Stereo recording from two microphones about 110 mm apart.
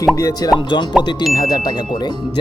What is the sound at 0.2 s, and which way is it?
Speech, 35° left (ahead or behind).